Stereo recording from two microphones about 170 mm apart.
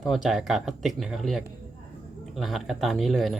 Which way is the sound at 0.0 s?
Centre (ahead or behind).